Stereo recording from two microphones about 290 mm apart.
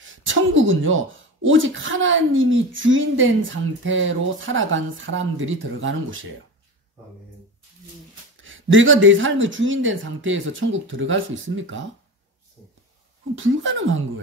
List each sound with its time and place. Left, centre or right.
0.0 s speech: right
8.4 s speech: right
13.4 s speech: right